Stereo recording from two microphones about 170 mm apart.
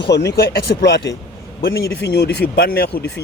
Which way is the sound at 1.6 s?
65° left (ahead or behind).